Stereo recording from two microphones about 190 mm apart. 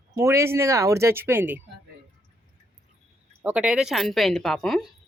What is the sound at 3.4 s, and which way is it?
Speech, 5° right (ahead or behind).